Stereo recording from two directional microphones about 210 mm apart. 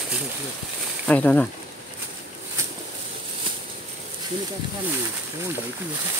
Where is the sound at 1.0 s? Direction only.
5° left (ahead or behind).